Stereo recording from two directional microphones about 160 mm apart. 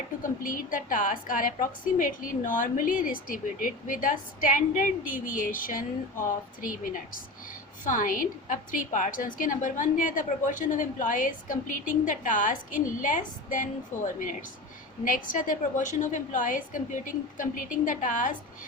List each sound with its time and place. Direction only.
0.2 s a woman's voice: 60° left (ahead or behind)